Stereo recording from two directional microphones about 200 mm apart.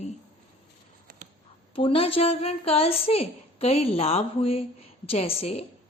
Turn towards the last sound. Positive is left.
turn(degrees=30)  # may be behind; listen again after turning